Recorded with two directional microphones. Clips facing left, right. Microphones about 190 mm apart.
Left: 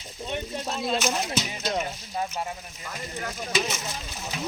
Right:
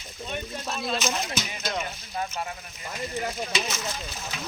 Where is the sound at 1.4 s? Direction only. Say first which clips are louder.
Left 3 dB; 30° left (ahead or behind).